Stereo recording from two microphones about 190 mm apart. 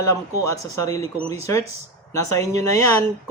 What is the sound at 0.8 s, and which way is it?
Speech, 15° left (ahead or behind).